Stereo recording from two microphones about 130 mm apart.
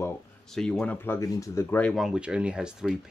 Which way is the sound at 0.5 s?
5° left (ahead or behind).